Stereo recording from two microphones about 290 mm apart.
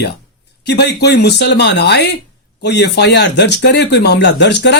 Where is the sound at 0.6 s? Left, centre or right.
Left.